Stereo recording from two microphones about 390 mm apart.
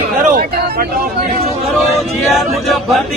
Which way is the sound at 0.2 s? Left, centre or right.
Right.